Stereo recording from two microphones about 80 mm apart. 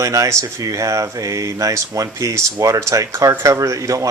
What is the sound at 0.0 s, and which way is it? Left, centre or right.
Speech, right.